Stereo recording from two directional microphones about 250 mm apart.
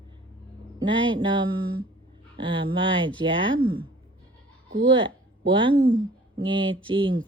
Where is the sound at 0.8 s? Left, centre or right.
Centre.